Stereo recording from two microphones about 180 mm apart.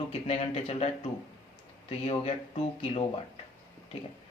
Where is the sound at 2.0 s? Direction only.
35° left (ahead or behind).